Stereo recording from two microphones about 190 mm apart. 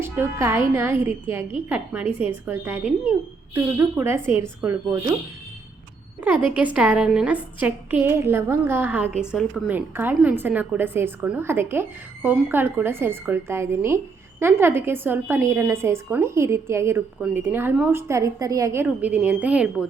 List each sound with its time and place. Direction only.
0.0 s a woman's voice: 15° right (ahead or behind)
2.1 s a woman's voice: 30° left (ahead or behind)
3.5 s a woman's voice: 10° right (ahead or behind)
6.2 s a woman's voice: 10° right (ahead or behind)